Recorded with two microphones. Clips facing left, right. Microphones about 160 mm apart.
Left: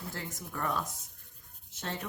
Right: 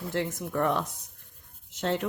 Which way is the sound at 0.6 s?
75° right (ahead or behind).